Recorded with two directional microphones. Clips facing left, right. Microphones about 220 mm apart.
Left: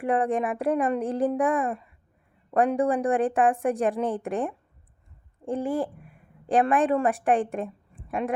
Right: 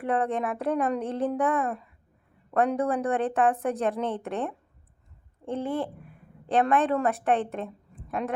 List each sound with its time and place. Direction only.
0.0 s a woman's voice: 15° left (ahead or behind)
2.7 s a woman's voice: 15° left (ahead or behind)
5.5 s a woman's voice: 15° left (ahead or behind)